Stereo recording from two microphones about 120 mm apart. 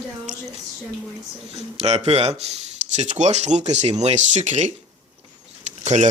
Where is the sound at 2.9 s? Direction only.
75° right (ahead or behind).